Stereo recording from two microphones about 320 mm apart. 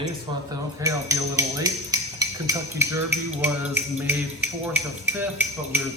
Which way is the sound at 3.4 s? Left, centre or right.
Centre.